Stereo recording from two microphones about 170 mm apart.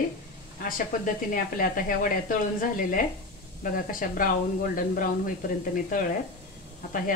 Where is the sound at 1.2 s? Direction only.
55° left (ahead or behind).